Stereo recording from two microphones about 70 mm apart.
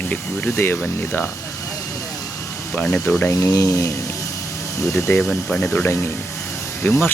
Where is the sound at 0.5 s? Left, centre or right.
Left.